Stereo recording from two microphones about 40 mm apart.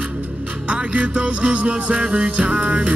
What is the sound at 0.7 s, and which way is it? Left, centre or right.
Music, right.